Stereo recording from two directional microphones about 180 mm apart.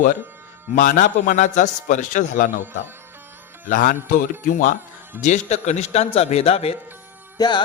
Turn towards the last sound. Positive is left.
turn(degrees=20)  # may be behind; listen again after turning